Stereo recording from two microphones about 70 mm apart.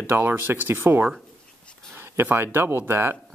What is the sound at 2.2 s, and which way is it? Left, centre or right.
Speech, right.